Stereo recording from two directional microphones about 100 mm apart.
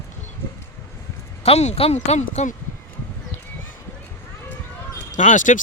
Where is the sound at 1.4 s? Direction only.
90° left.